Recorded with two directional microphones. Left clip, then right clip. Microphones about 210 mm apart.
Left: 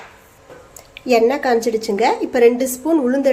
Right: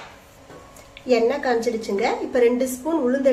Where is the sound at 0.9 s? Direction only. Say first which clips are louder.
Left 5 dB; 35° left (ahead or behind).